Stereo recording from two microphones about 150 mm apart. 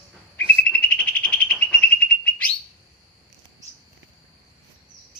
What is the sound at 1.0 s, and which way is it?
Bird, 10° left (ahead or behind).